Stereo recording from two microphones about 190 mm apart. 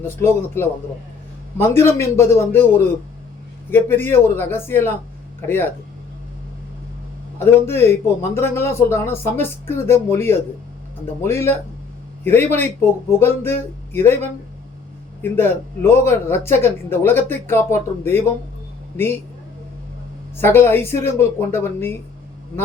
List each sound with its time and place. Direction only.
0.0 s a man's voice: 15° left (ahead or behind)
7.3 s a man's voice: 10° left (ahead or behind)
20.3 s a man's voice: 10° left (ahead or behind)